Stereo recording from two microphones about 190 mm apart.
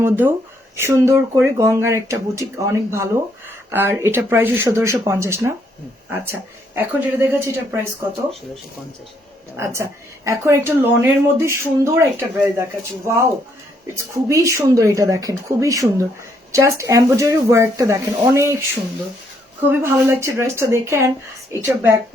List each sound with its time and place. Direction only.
0.0 s speech: 10° right (ahead or behind)
6.7 s speech: 10° right (ahead or behind)
9.6 s speech: 15° right (ahead or behind)
13.9 s speech: 15° right (ahead or behind)
19.8 s speech: 15° right (ahead or behind)